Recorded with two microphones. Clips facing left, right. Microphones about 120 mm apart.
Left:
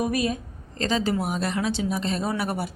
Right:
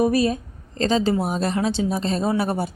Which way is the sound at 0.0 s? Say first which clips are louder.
Right 6 dB; 35° right (ahead or behind).